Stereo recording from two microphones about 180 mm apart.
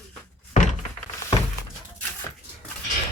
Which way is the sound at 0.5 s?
40° left (ahead or behind).